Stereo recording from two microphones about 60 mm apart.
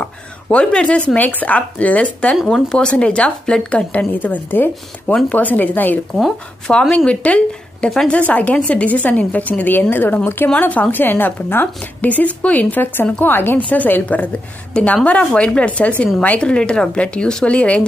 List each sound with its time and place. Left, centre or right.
0.0 s speech: centre
4.1 s a woman's voice: left
6.7 s a woman's voice: centre; by 10.5 s left
10.5 s a woman's voice: left